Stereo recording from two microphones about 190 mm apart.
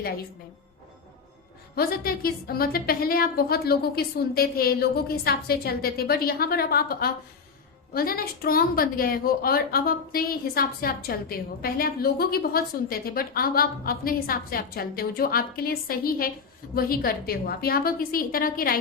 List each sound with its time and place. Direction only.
1.7 s a woman's voice: 50° left (ahead or behind)